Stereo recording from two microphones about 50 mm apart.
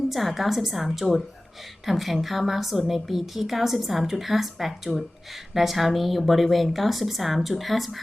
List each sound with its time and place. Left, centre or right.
0.1 s a woman's voice: centre